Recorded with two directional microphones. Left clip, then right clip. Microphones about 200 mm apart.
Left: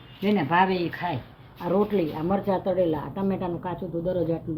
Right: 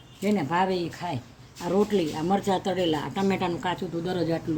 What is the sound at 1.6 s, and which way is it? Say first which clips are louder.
Speech: even; 40° right (ahead or behind).